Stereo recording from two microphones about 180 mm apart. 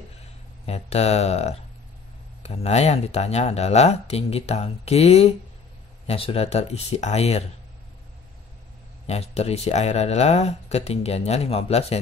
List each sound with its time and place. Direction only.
0.7 s speech: 35° left (ahead or behind)
9.0 s speech: 35° left (ahead or behind)